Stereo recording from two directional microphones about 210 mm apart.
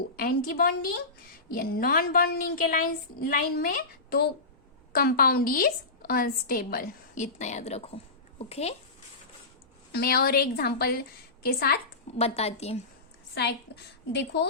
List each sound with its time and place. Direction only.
0.2 s a woman's voice: 45° left (ahead or behind)
9.9 s a woman's voice: 50° left (ahead or behind)
12.1 s a woman's voice: 30° left (ahead or behind)
13.7 s a woman's voice: 55° left (ahead or behind)